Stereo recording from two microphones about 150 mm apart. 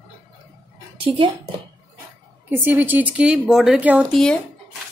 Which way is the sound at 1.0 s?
40° right (ahead or behind).